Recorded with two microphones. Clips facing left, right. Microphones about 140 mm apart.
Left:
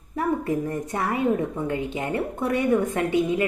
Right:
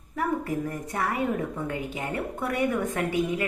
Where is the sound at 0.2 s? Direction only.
25° left (ahead or behind).